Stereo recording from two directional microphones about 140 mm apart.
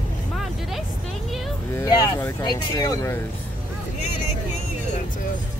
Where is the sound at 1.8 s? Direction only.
25° left (ahead or behind).